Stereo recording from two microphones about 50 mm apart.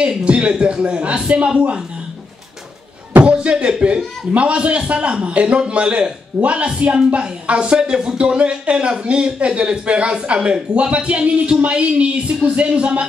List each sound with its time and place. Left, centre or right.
0.0 s speech: right
3.3 s speech: right